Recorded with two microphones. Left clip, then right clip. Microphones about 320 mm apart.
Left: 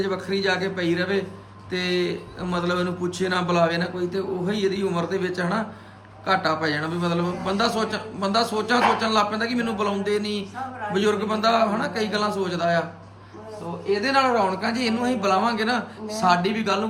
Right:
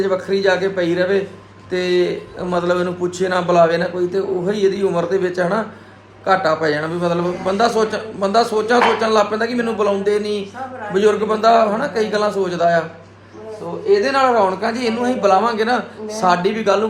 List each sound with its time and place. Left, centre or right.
0.0 s a man's voice: centre
14.0 s a man's voice: centre